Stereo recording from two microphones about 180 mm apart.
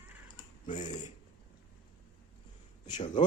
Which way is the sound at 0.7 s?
45° left (ahead or behind).